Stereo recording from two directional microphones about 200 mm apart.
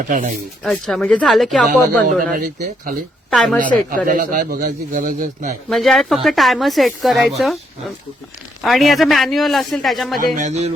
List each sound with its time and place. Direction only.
0.1 s music: 40° right (ahead or behind)
0.6 s speech: centre (ahead or behind)
2.3 s a man's voice: 45° right (ahead or behind)
3.2 s a woman's voice: 5° left (ahead or behind)
3.8 s a man's voice: 40° right (ahead or behind)
5.6 s speech: centre (ahead or behind)
8.6 s speech: centre (ahead or behind)
10.3 s music: 35° right (ahead or behind)